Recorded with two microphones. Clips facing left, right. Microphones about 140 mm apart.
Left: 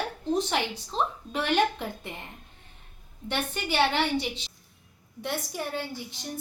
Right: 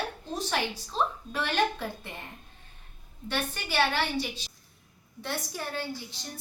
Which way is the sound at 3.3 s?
20° left (ahead or behind).